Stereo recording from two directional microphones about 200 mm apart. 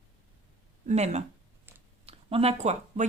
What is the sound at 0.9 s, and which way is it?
A woman's voice, 35° right (ahead or behind).